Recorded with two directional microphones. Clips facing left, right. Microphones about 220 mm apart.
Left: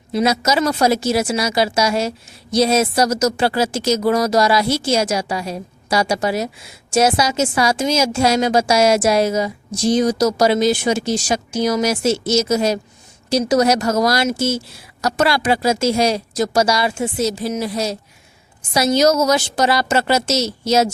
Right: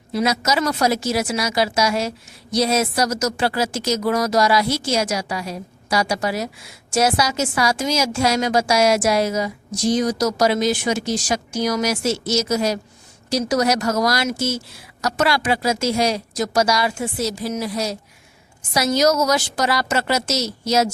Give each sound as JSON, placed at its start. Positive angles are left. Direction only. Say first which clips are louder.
{"t": 0.1, "sound": "a woman's voice", "louder": "left 3 dB", "side_deg": 25}